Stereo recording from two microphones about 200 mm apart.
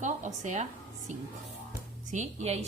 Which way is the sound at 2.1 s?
35° right (ahead or behind).